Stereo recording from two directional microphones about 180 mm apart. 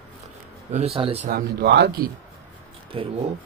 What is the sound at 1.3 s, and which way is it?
Speech, 65° right (ahead or behind).